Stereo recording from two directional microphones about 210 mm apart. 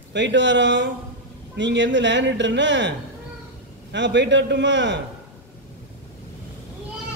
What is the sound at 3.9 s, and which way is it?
A man's voice, 60° right (ahead or behind).